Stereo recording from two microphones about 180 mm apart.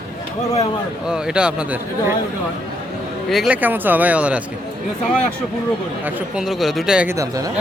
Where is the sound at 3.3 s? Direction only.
5° right (ahead or behind).